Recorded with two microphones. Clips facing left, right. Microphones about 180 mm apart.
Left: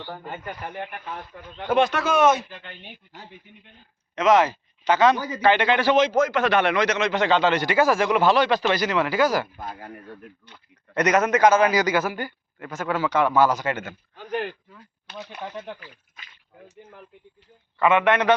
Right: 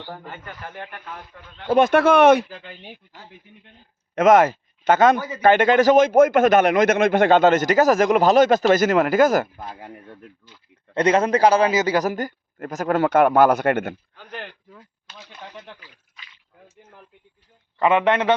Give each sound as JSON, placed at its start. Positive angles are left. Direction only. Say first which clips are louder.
{"t": 0.3, "sound": "a man's voice", "louder": "left 3 dB", "side_deg": 15}
{"t": 1.8, "sound": "speech", "louder": "right 6 dB", "side_deg": -55}
{"t": 4.1, "sound": "speech", "louder": "right 4 dB", "side_deg": -50}
{"t": 10.9, "sound": "speech", "louder": "right 2 dB", "side_deg": -30}
{"t": 11.7, "sound": "a man's voice", "louder": "right 1 dB", "side_deg": -20}
{"t": 11.9, "sound": "speech", "louder": "right 3 dB", "side_deg": -40}
{"t": 13.0, "sound": "speech", "louder": "right 5 dB", "side_deg": -55}
{"t": 15.0, "sound": "speech", "louder": "left 10 dB", "side_deg": 65}
{"t": 15.8, "sound": "a sound", "louder": "left 3 dB", "side_deg": 45}
{"t": 17.7, "sound": "speech", "louder": "right 1 dB", "side_deg": -35}